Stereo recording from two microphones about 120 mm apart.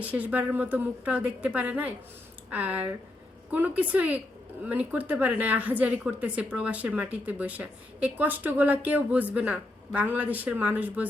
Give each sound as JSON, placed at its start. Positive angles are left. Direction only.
{"t": 0.0, "sound": "a woman's voice", "side_deg": -10}